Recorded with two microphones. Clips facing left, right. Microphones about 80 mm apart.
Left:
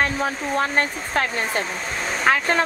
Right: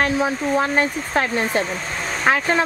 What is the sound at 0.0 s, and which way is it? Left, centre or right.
Speech, centre.